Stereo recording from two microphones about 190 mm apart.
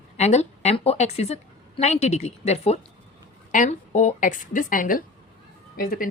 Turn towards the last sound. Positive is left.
turn(degrees=50)  # may be behind; listen again after turning